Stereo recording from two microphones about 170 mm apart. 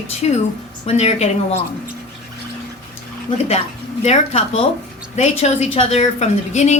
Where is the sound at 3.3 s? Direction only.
30° left (ahead or behind).